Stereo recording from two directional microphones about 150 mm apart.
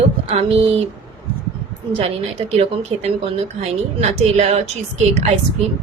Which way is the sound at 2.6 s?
45° right (ahead or behind).